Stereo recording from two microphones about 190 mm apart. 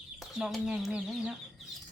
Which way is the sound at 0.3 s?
5° right (ahead or behind).